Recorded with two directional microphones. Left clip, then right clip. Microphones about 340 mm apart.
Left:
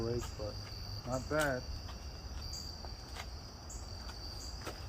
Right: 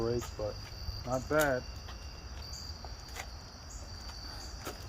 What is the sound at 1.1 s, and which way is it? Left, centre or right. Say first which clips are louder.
Speech: right 5 dB; right.